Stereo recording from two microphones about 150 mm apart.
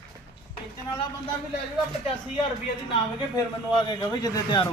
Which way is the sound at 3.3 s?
30° left (ahead or behind).